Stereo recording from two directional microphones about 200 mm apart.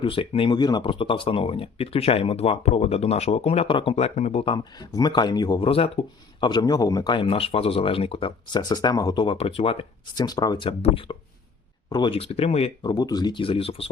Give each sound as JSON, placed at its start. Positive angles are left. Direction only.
{"t": 0.0, "sound": "speech", "side_deg": 25}